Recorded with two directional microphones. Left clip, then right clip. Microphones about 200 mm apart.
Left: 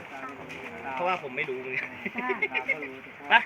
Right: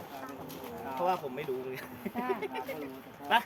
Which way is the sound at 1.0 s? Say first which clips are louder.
Left 3 dB; 15° right (ahead or behind).